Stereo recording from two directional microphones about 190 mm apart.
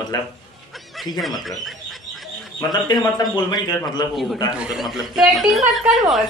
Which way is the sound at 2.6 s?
20° left (ahead or behind).